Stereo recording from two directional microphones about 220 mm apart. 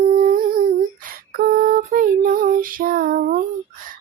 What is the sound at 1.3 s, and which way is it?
Lullaby, 40° right (ahead or behind).